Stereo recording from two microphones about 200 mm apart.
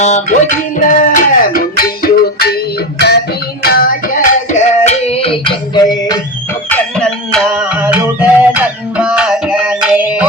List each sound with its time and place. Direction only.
0.0 s music: 35° left (ahead or behind)
6.7 s music: 5° left (ahead or behind)
7.8 s music: 10° right (ahead or behind)